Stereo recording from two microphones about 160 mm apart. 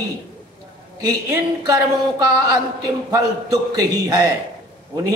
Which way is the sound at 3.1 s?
20° right (ahead or behind).